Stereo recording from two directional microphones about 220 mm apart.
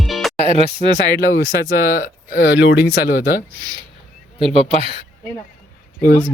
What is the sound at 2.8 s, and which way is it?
Speech, 45° left (ahead or behind).